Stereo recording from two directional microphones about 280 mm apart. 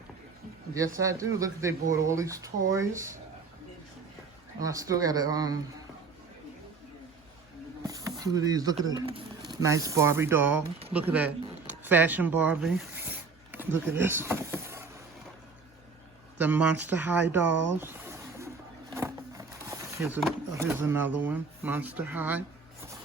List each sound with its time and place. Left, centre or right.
0.7 s speech: centre
4.6 s speech: centre
7.9 s speech: centre
11.8 s zipper: centre
16.4 s speech: centre
17.7 s a sound: centre
19.7 s speech: centre